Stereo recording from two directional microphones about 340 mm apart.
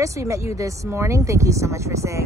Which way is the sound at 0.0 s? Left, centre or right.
Centre.